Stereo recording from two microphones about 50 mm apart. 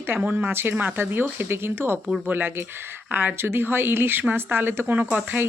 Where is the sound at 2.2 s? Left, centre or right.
Right.